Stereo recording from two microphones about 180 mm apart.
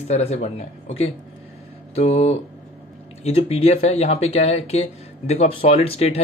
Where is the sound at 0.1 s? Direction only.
35° left (ahead or behind).